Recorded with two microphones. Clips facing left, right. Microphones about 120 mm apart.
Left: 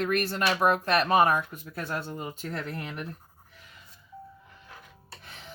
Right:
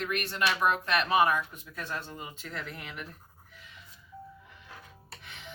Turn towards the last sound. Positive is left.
turn(degrees=35)  # may be behind; listen again after turning